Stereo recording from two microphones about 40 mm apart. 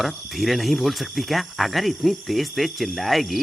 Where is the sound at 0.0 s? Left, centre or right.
Centre.